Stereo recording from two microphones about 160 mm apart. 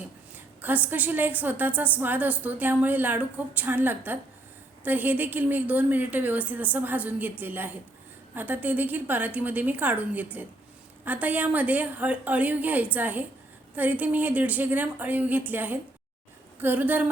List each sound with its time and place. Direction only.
0.0 s a woman's voice: 10° right (ahead or behind)